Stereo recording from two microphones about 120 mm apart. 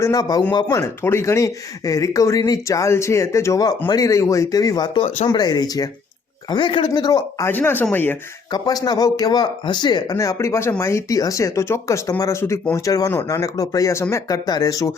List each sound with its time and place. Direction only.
0.0 s speech: 30° left (ahead or behind)
6.5 s speech: 40° left (ahead or behind)
7.4 s speech: 15° left (ahead or behind)
8.4 s speech: 35° left (ahead or behind)